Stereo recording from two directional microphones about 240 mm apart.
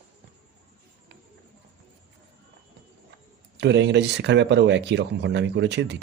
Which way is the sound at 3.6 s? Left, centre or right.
Right.